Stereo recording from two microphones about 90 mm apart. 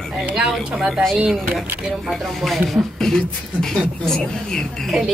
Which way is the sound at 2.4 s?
Centre (ahead or behind).